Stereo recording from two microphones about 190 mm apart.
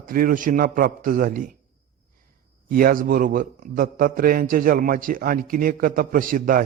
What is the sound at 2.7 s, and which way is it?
A man's voice, 50° right (ahead or behind).